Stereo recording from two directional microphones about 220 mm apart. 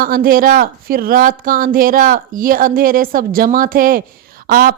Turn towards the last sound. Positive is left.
turn(degrees=-40)  # may be behind; listen again after turning